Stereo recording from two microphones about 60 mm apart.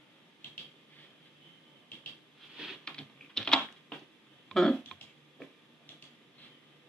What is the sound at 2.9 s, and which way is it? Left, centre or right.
Typing, centre.